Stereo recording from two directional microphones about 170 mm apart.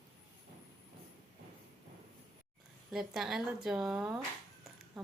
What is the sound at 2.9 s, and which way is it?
Speech, 5° right (ahead or behind).